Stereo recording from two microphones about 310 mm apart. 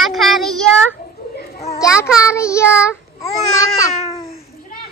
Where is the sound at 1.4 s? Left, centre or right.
Left.